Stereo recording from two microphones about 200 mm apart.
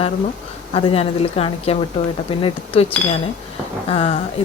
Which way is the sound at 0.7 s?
30° left (ahead or behind).